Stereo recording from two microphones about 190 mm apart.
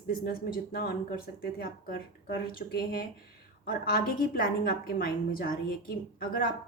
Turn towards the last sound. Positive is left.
turn(degrees=50)  # may be behind; listen again after turning